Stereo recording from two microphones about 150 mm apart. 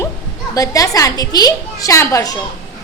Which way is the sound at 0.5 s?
20° left (ahead or behind).